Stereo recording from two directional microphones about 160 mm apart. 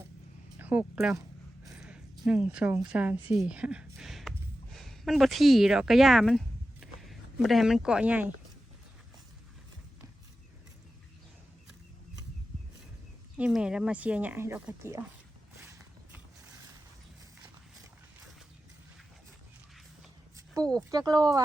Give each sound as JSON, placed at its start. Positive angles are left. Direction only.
{"t": 0.6, "sound": "speech", "side_deg": -10}
{"t": 1.7, "sound": "a sound", "side_deg": -5}
{"t": 2.9, "sound": "speech", "side_deg": -10}
{"t": 13.3, "sound": "speech", "side_deg": -5}
{"t": 15.6, "sound": "a sound", "side_deg": -15}
{"t": 20.3, "sound": "speech", "side_deg": -20}